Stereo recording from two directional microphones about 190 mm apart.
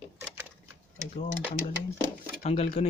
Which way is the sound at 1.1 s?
35° left (ahead or behind).